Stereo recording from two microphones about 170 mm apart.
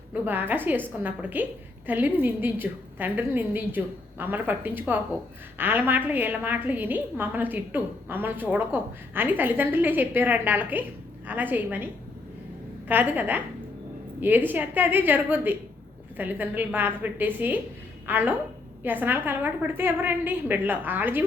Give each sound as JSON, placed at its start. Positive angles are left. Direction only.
{"t": 0.1, "sound": "a woman's voice", "side_deg": -10}
{"t": 12.9, "sound": "a woman's voice", "side_deg": -10}